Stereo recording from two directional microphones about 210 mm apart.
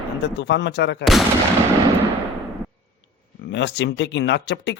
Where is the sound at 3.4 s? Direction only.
55° left (ahead or behind).